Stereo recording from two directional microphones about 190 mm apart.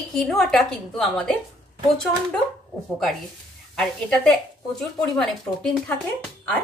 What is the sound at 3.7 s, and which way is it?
A woman's voice, 5° left (ahead or behind).